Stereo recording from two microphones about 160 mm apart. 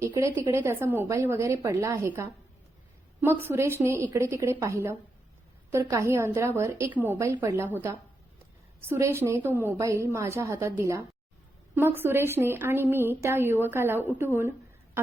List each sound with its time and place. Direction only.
0.0 s a woman's voice: 20° right (ahead or behind)
3.4 s a woman's voice: 15° right (ahead or behind)